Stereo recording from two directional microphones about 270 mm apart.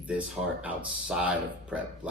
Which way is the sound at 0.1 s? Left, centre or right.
Centre.